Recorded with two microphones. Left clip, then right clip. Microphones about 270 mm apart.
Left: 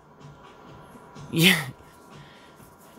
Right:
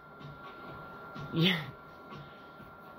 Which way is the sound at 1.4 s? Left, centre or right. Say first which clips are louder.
Left 10 dB; left.